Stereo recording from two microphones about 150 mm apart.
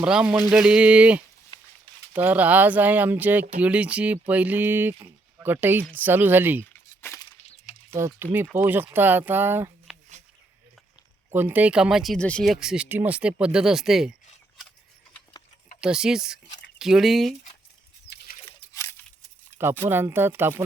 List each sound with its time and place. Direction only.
0.0 s speech: 5° right (ahead or behind)
5.0 s a sound: 15° right (ahead or behind)
5.9 s speech: 10° right (ahead or behind)
6.7 s a sound: 15° left (ahead or behind)
7.9 s speech: 15° right (ahead or behind)
11.3 s speech: 15° right (ahead or behind)
15.8 s speech: 5° right (ahead or behind)
18.7 s a sound: 15° left (ahead or behind)
19.5 s speech: 15° right (ahead or behind)